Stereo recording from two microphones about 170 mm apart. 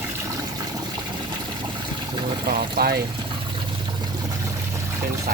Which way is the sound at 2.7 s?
65° right (ahead or behind).